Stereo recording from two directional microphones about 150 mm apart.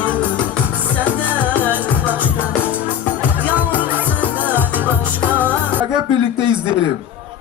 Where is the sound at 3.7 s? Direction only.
10° right (ahead or behind).